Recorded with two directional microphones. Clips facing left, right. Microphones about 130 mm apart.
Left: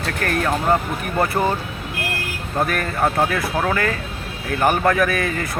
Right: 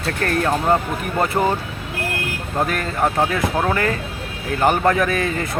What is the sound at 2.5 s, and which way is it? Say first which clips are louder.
Speech: even; 20° right (ahead or behind).